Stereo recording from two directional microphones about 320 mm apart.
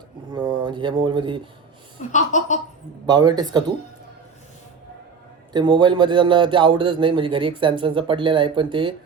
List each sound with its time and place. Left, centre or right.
0.3 s speech: centre
2.1 s speech: left
3.1 s speech: centre
5.5 s speech: centre